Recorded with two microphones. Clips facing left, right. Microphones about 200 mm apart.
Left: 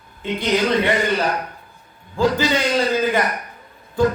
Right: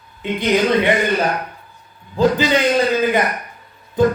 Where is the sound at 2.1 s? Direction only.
20° right (ahead or behind).